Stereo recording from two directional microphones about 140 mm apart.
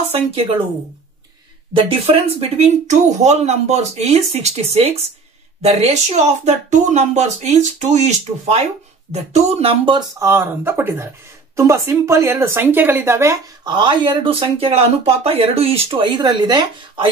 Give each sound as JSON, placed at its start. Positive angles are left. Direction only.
{"t": 1.8, "sound": "speech", "side_deg": -45}
{"t": 10.1, "sound": "speech", "side_deg": -20}
{"t": 13.7, "sound": "speech", "side_deg": -35}